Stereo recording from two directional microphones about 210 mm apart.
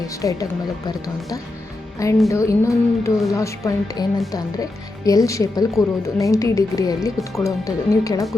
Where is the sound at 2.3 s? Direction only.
15° left (ahead or behind).